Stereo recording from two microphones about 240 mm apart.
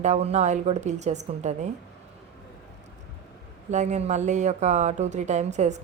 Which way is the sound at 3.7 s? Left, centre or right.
Right.